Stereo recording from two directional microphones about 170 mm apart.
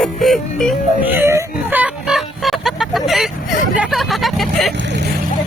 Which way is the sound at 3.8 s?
Centre (ahead or behind).